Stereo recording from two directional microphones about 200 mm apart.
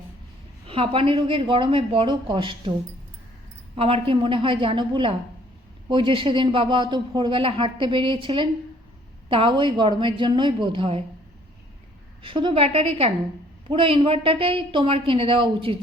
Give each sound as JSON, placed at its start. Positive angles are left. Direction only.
{"t": 0.7, "sound": "speech", "side_deg": -25}
{"t": 3.8, "sound": "speech", "side_deg": -30}
{"t": 12.2, "sound": "speech", "side_deg": -25}